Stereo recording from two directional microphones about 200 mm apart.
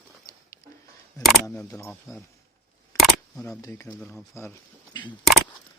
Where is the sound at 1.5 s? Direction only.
15° left (ahead or behind).